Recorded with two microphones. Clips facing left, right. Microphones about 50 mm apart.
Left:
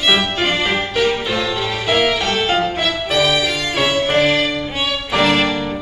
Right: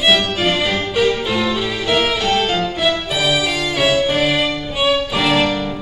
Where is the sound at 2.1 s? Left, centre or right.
Centre.